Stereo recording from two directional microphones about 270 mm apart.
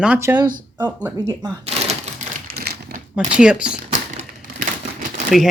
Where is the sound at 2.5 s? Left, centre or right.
Right.